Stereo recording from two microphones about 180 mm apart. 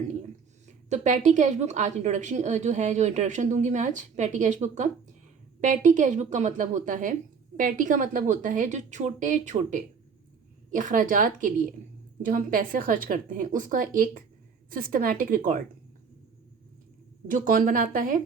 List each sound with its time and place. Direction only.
0.9 s a woman's voice: 45° right (ahead or behind)
17.2 s a woman's voice: 45° right (ahead or behind)